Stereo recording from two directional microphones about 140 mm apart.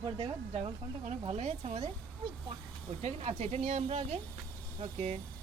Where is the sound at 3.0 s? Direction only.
50° right (ahead or behind).